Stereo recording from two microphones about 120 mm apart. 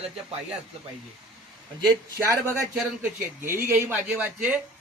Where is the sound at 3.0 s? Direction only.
20° right (ahead or behind).